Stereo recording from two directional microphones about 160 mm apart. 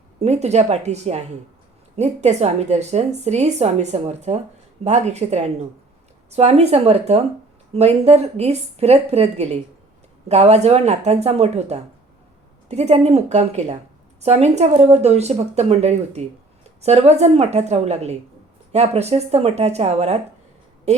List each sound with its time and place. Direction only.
0.2 s a woman's voice: 45° right (ahead or behind)